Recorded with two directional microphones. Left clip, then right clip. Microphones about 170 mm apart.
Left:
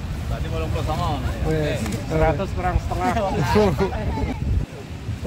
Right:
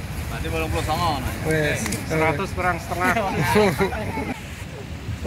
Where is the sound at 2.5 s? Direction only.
65° left (ahead or behind).